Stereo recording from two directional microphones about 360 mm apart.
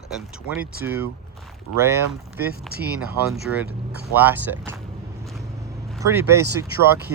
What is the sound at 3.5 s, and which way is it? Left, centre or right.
Speech, centre.